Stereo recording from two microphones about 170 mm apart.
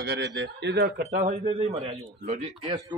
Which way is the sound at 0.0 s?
80° right.